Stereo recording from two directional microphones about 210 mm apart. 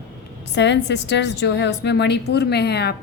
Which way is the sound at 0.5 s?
55° left (ahead or behind).